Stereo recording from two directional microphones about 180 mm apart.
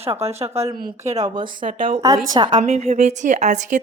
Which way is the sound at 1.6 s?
50° right (ahead or behind).